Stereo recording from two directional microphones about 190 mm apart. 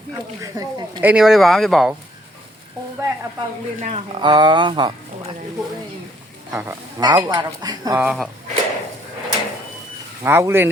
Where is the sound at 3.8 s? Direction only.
35° right (ahead or behind).